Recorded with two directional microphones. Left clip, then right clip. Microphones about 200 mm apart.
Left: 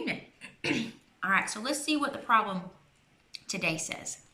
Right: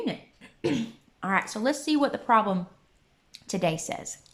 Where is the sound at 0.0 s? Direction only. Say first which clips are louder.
Right 2 dB; 35° right (ahead or behind).